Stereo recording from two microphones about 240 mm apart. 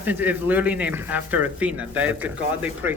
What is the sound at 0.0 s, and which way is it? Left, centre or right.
Speech, centre.